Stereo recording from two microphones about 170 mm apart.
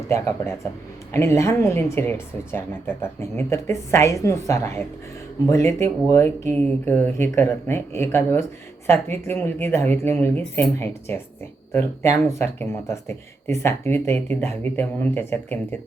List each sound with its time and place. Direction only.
0.1 s a woman's voice: 15° left (ahead or behind)
12.4 s a woman's voice: 15° left (ahead or behind)